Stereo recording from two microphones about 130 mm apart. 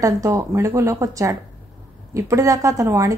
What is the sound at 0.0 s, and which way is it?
A woman's voice, 25° right (ahead or behind).